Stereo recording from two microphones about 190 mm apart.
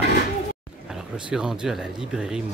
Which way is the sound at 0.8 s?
5° right (ahead or behind).